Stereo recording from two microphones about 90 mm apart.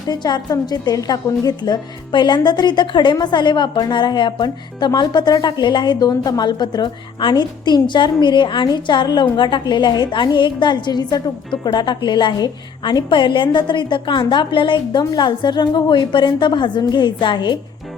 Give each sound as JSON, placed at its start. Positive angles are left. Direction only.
{"t": 0.1, "sound": "a woman's voice", "side_deg": 50}